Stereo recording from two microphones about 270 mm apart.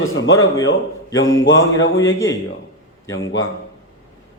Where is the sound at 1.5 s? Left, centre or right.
Left.